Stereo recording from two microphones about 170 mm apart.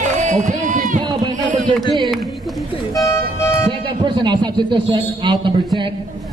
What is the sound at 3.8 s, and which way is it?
A man's voice, 30° right (ahead or behind).